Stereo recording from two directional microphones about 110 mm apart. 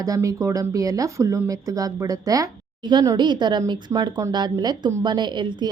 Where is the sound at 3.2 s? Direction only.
45° right (ahead or behind).